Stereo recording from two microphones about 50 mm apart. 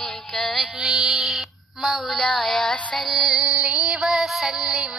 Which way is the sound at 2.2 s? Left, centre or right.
Left.